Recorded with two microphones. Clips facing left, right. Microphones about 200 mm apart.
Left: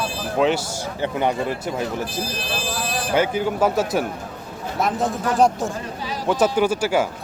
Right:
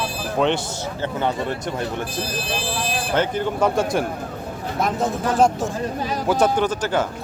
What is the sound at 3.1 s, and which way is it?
Speech, 10° left (ahead or behind).